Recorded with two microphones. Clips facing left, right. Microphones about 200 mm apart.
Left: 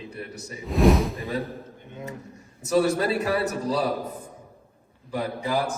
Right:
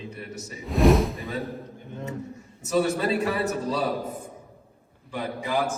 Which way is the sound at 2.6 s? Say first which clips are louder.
Left 2 dB; 35° left (ahead or behind).